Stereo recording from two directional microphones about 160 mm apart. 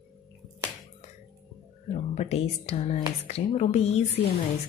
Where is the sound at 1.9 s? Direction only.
45° left (ahead or behind).